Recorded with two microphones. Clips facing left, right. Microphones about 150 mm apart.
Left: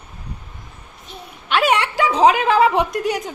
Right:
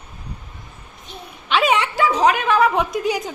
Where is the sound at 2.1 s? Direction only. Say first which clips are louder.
Left 4 dB; 30° left (ahead or behind).